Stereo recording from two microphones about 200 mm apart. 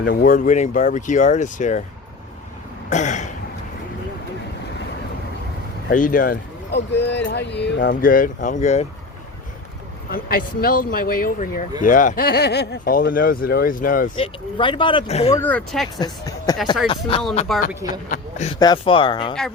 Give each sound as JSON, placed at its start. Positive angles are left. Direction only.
{"t": 0.1, "sound": "speech", "side_deg": 45}
{"t": 2.9, "sound": "speech", "side_deg": 35}
{"t": 5.9, "sound": "speech", "side_deg": 40}
{"t": 10.1, "sound": "speech", "side_deg": 45}
{"t": 14.2, "sound": "speech", "side_deg": 25}
{"t": 15.3, "sound": "speech", "side_deg": 10}
{"t": 16.9, "sound": "speech", "side_deg": 25}
{"t": 17.5, "sound": "speech", "side_deg": 0}
{"t": 18.1, "sound": "a sound", "side_deg": 35}
{"t": 18.6, "sound": "speech", "side_deg": 25}